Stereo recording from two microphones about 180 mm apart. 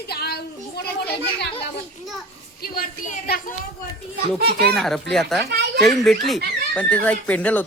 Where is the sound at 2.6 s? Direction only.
50° left (ahead or behind).